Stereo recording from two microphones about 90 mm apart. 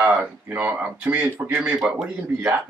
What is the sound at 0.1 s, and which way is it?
Speech, 20° right (ahead or behind).